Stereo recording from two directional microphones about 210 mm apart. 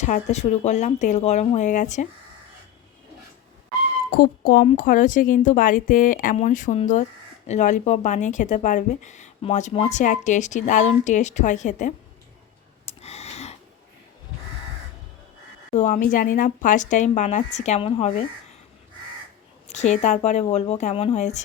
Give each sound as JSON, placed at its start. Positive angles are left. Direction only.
{"t": 0.0, "sound": "speech", "side_deg": 35}
{"t": 4.1, "sound": "speech", "side_deg": 40}
{"t": 12.8, "sound": "a sound", "side_deg": 30}
{"t": 15.7, "sound": "speech", "side_deg": 35}
{"t": 19.6, "sound": "speech", "side_deg": 35}